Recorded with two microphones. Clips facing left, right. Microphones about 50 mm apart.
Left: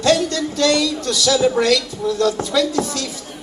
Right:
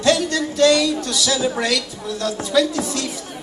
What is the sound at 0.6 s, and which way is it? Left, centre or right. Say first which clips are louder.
Speech: right 2 dB; right.